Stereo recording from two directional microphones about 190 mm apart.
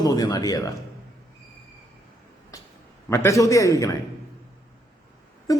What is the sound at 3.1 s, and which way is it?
Speech, 15° left (ahead or behind).